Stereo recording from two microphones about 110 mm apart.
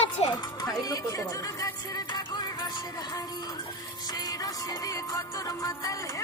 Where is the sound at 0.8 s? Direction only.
35° left (ahead or behind).